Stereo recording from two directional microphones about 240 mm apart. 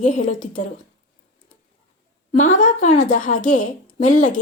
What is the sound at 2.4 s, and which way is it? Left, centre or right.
A woman's voice, left.